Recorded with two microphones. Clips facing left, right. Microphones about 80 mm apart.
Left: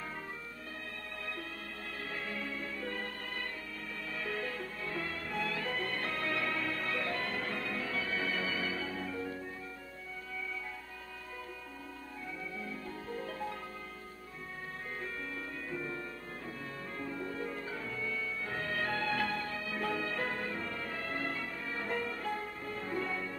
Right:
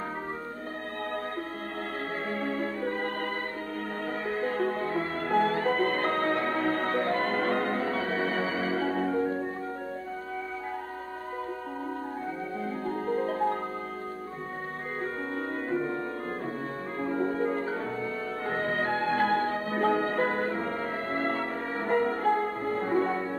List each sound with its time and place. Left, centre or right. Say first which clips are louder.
2.2 s music: right 10 dB; right
4.3 s music: right 8 dB; right
4.6 s music: right 12 dB; right
12.6 s music: right 12 dB; right
15.3 s music: right 11 dB; right
17.0 s music: right 12 dB; right
19.2 s music: right 11 dB; right